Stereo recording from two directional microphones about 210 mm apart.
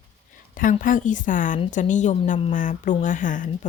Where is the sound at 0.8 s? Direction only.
40° left (ahead or behind).